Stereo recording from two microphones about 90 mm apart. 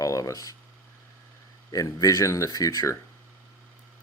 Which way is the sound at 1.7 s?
40° left (ahead or behind).